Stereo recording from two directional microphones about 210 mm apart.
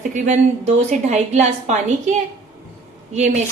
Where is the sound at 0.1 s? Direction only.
35° right (ahead or behind).